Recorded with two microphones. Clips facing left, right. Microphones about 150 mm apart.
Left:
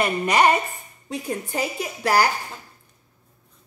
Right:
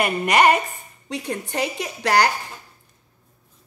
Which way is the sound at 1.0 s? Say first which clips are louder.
Even; 75° right (ahead or behind).